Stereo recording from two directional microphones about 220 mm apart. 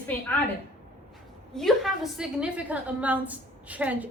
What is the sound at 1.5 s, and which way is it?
A man's voice, centre (ahead or behind).